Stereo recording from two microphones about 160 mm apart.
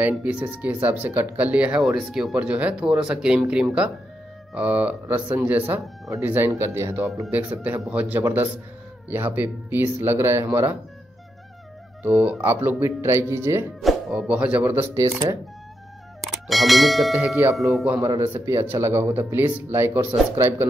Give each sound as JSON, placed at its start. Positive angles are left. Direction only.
{"t": 0.0, "sound": "speech", "side_deg": -10}
{"t": 12.0, "sound": "speech", "side_deg": -5}
{"t": 13.7, "sound": "speech", "side_deg": -5}
{"t": 16.4, "sound": "speech", "side_deg": 0}
{"t": 18.0, "sound": "speech", "side_deg": -15}